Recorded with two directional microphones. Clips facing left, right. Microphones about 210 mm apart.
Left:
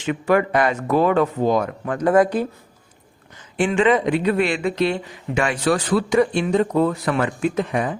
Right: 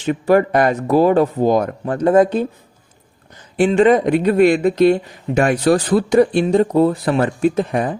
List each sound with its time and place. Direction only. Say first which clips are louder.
0.0 s speech: right 4 dB; 35° right (ahead or behind)
1.8 s speech: right 3 dB; 30° right (ahead or behind)
3.6 s speech: right 5 dB; 40° right (ahead or behind)